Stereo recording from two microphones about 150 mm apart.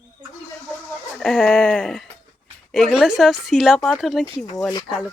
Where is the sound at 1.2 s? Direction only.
5° left (ahead or behind).